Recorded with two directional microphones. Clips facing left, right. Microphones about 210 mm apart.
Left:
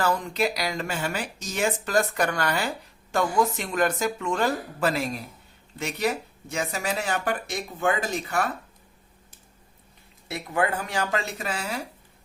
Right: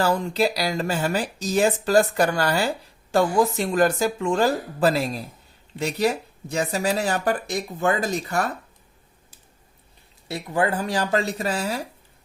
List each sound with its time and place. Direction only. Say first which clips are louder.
0.0 s speech: right 4 dB; 30° right (ahead or behind)
10.2 s speech: right 3 dB; 30° right (ahead or behind)